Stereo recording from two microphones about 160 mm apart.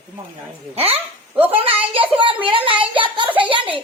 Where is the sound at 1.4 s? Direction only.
35° right (ahead or behind).